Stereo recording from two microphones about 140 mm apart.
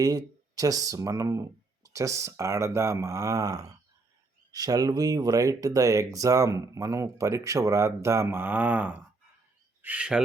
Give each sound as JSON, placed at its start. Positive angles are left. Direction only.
{"t": 0.0, "sound": "speech", "side_deg": -25}